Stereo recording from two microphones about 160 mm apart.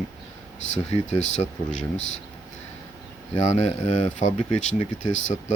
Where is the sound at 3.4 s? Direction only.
45° left (ahead or behind).